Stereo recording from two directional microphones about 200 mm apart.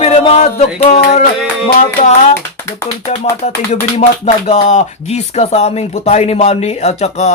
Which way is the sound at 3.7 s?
35° left (ahead or behind).